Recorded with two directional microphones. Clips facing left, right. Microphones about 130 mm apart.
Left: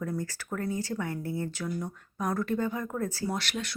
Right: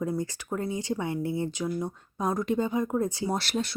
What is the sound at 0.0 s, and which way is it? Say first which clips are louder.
Speech: right 4 dB; 20° right (ahead or behind).